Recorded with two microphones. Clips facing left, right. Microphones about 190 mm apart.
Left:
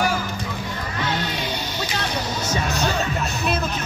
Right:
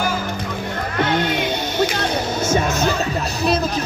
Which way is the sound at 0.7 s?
55° right (ahead or behind).